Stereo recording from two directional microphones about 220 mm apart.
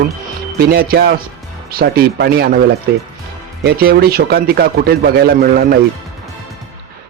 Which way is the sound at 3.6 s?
45° right (ahead or behind).